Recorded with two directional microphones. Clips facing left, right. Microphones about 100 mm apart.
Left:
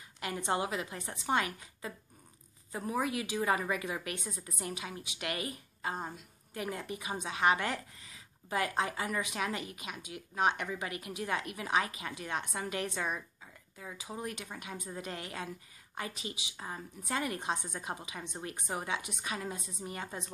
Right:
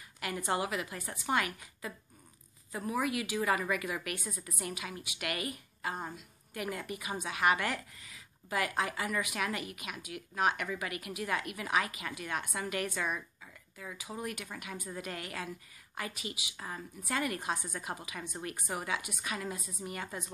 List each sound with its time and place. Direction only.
0.2 s a woman's voice: 30° left (ahead or behind)